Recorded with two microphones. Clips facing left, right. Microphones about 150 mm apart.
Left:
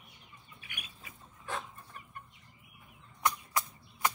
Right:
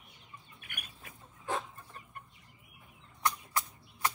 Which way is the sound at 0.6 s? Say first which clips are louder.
Left 3 dB; 55° right (ahead or behind).